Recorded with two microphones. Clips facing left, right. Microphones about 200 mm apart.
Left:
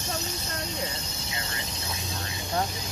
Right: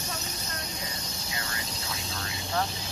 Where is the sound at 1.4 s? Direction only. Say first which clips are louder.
Left 1 dB; 25° left (ahead or behind).